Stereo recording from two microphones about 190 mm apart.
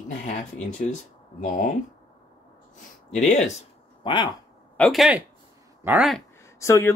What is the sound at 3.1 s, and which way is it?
Speech, 40° left (ahead or behind).